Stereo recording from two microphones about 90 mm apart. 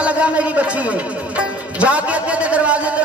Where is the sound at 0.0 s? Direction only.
15° right (ahead or behind).